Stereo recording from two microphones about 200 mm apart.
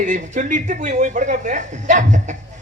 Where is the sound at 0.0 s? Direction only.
40° right (ahead or behind).